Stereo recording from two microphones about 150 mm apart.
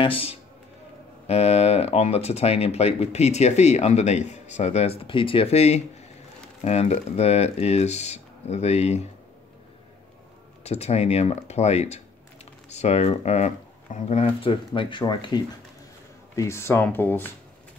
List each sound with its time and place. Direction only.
0.0 s speech: 35° left (ahead or behind)
10.6 s speech: 45° left (ahead or behind)
16.3 s speech: 20° left (ahead or behind)